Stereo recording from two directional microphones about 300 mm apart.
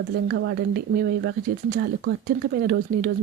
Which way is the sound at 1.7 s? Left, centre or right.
Right.